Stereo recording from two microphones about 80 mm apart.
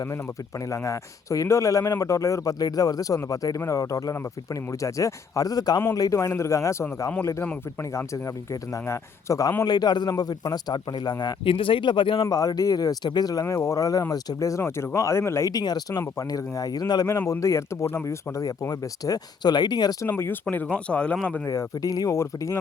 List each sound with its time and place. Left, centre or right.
0.7 s a man's voice: left
8.9 s a man's voice: left
9.6 s speech: left
12.2 s a man's voice: left
15.5 s speech: left
16.0 s speech: left
17.1 s a man's voice: left
18.7 s speech: left
20.1 s speech: left
21.8 s speech: left